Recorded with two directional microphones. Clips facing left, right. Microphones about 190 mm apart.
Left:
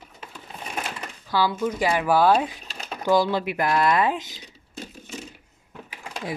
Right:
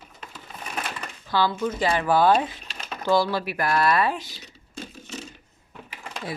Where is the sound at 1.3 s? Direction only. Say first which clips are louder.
Even; 10° left (ahead or behind).